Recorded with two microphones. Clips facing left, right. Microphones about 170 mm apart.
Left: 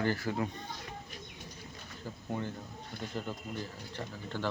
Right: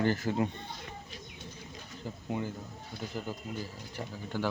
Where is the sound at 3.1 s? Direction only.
5° right (ahead or behind).